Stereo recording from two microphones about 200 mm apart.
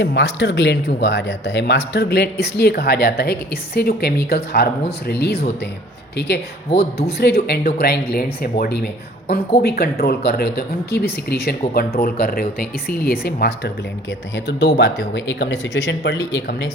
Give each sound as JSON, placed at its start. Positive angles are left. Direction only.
{"t": 0.0, "sound": "speech", "side_deg": 60}